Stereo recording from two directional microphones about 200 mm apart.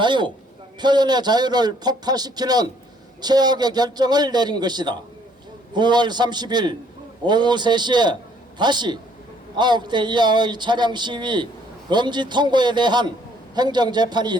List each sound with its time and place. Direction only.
0.0 s speech: 25° right (ahead or behind)